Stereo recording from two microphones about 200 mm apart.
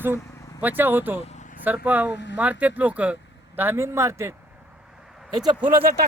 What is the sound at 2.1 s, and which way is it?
Speech, 60° left (ahead or behind).